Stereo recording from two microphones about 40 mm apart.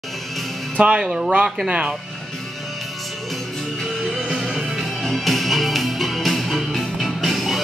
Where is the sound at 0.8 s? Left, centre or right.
Right.